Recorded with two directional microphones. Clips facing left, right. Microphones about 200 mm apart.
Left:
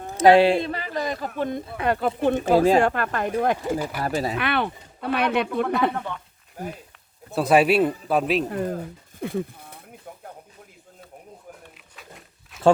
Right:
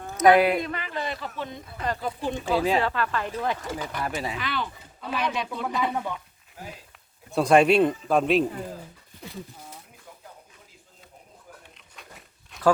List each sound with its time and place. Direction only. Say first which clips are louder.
0.0 s speech: left 3 dB; 30° left (ahead or behind); by 2.4 s 60° left (ahead or behind)
2.4 s speech: left 6 dB; 45° left (ahead or behind)
4.0 s speech: left 3 dB; 40° left (ahead or behind)
4.4 s speech: left 7 dB; 60° left (ahead or behind)
5.9 s speech: right 1 dB; 10° right (ahead or behind)
7.3 s a man's voice: even; 5° left (ahead or behind)
8.4 s speech: left 6 dB; 70° left (ahead or behind)
12.5 s a sound: left 4 dB; 5° left (ahead or behind)